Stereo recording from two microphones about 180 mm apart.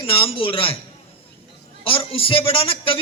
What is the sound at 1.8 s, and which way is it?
A man's voice, 30° left (ahead or behind).